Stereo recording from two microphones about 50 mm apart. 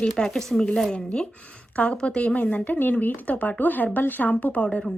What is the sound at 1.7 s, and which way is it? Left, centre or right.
A woman's voice, left.